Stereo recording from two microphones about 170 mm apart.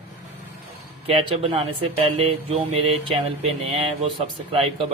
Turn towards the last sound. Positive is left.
turn(degrees=-30)  # may be behind; listen again after turning